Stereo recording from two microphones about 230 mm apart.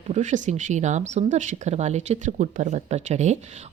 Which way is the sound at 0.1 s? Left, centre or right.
Right.